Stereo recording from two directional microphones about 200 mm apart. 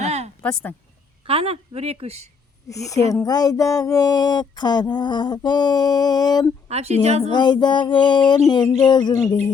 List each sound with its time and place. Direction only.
0.0 s a sound: 35° right (ahead or behind)
1.2 s a woman's voice: 30° right (ahead or behind)
2.6 s speech: 15° left (ahead or behind)
6.7 s a woman's voice: 30° right (ahead or behind)
7.3 s speech: 20° left (ahead or behind)